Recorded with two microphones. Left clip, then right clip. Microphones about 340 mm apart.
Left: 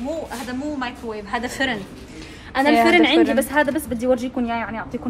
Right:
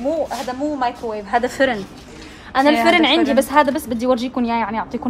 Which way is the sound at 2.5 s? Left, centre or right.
Right.